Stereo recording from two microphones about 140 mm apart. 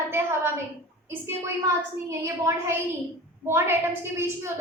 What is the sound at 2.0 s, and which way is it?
A woman's voice, 20° right (ahead or behind).